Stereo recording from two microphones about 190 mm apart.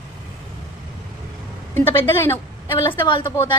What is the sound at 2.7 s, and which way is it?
Speech, 20° left (ahead or behind).